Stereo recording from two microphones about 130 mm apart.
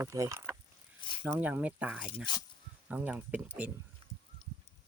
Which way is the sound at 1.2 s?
15° right (ahead or behind).